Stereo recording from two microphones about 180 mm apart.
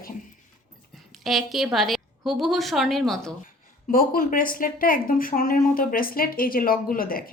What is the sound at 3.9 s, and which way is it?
Speech, 50° left (ahead or behind).